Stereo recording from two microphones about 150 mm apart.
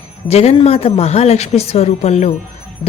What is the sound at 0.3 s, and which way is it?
Speech, 45° left (ahead or behind).